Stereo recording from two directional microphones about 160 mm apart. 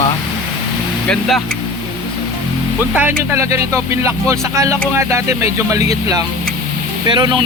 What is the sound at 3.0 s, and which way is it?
Speech, 15° right (ahead or behind).